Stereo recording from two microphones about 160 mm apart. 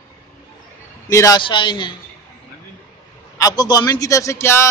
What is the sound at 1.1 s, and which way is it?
Speech, 20° left (ahead or behind).